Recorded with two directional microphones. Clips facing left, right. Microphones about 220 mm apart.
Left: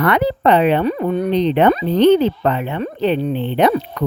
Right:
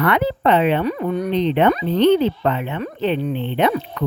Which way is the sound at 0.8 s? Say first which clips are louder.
Left 3 dB; 30° left (ahead or behind).